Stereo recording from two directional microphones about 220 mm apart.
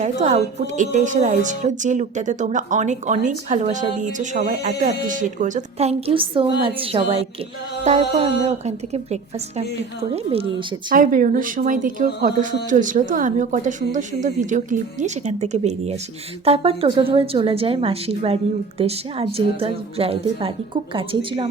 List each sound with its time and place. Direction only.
0.0 s a woman's voice: 35° right (ahead or behind)
10.8 s a woman's voice: 40° right (ahead or behind); by 21.4 s 25° right (ahead or behind)